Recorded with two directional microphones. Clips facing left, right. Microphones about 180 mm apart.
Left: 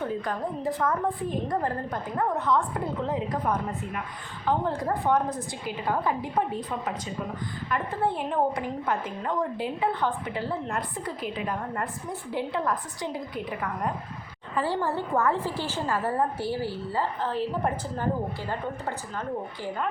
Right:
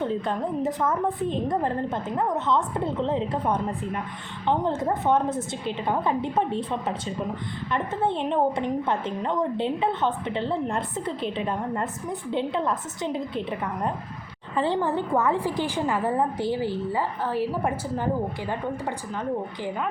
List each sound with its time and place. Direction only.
0.0 s a woman's voice: 20° right (ahead or behind)